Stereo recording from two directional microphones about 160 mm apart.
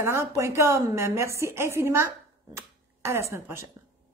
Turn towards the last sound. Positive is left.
turn(degrees=-15)  # may be behind; listen again after turning